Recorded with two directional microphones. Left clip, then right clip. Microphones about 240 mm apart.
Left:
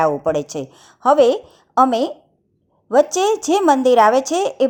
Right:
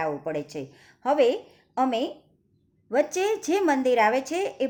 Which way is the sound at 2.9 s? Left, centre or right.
Left.